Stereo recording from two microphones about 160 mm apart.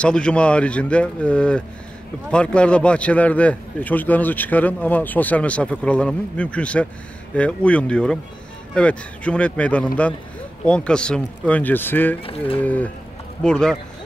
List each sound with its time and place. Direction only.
0.0 s a man's voice: 5° left (ahead or behind)
12.2 s speech: 35° left (ahead or behind)
12.5 s a man's voice: 10° left (ahead or behind)